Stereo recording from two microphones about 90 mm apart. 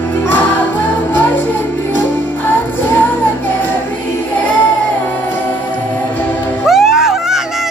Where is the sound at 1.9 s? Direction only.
25° left (ahead or behind).